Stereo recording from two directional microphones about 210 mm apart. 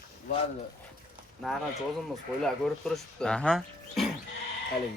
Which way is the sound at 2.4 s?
Centre (ahead or behind).